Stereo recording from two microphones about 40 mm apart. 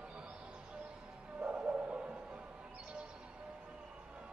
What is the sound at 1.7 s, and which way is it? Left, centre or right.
Music, right.